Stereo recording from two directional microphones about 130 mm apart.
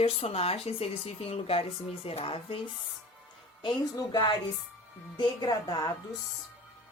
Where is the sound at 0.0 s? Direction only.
50° left (ahead or behind).